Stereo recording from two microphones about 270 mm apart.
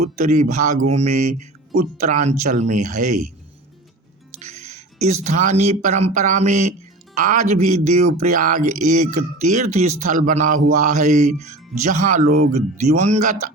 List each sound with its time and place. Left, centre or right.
0.3 s speech: right
4.4 s music: right
5.2 s speech: right